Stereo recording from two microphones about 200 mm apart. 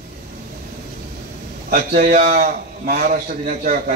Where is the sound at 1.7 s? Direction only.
45° right (ahead or behind).